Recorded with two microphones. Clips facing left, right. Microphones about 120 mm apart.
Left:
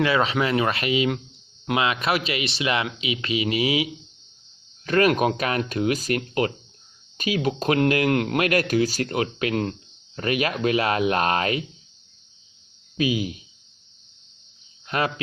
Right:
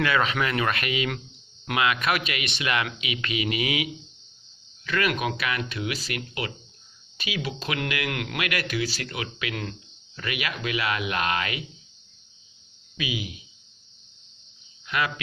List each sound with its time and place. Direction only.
0.0 s speech: 25° left (ahead or behind)
4.9 s speech: 40° left (ahead or behind)
13.0 s speech: 45° left (ahead or behind)
14.8 s speech: 40° left (ahead or behind)